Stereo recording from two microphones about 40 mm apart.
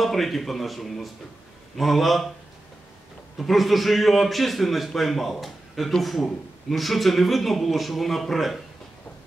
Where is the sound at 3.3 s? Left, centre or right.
Centre.